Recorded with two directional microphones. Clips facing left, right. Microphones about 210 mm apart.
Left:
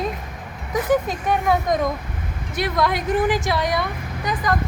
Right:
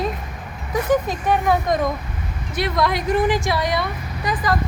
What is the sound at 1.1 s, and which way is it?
A woman's voice, centre (ahead or behind).